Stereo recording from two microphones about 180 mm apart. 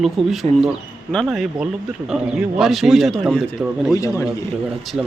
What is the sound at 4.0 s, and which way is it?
Speech, 20° left (ahead or behind).